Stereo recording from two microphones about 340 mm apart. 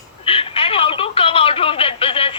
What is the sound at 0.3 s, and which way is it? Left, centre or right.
Telephone, centre.